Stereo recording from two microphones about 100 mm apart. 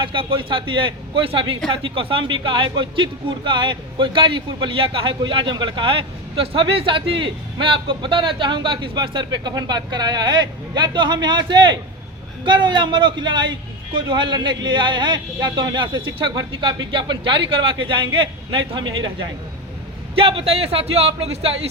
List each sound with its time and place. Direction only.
0.0 s a man's voice: 55° right (ahead or behind)
20.1 s speech: 65° right (ahead or behind); by 21.5 s 90° right